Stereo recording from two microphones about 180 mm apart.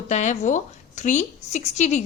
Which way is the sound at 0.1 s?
40° left (ahead or behind).